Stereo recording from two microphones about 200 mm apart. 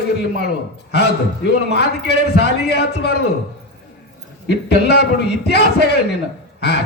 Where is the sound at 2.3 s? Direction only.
55° left (ahead or behind).